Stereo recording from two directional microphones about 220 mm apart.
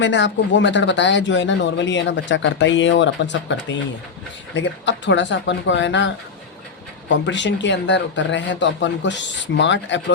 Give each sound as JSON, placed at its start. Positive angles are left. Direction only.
{"t": 0.0, "sound": "speech", "side_deg": 55}